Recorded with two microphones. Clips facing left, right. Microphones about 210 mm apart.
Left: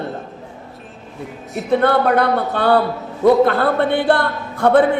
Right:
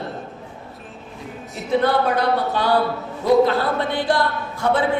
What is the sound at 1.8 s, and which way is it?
Speech, 55° left (ahead or behind).